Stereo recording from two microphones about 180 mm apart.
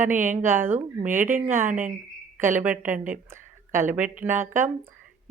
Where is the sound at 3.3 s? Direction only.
15° right (ahead or behind).